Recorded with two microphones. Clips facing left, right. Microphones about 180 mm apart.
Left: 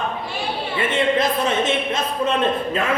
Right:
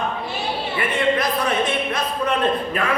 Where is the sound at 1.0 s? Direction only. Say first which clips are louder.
Left 1 dB; 25° left (ahead or behind).